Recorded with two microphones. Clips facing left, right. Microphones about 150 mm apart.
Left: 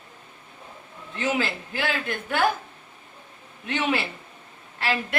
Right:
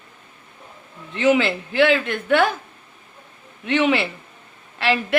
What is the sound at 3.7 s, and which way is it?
Speech, 85° right.